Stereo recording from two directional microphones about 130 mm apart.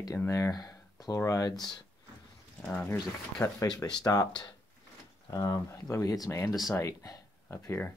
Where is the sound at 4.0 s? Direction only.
30° left (ahead or behind).